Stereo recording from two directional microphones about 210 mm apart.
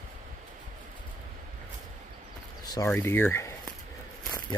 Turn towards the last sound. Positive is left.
turn(degrees=10)  # may be behind; listen again after turning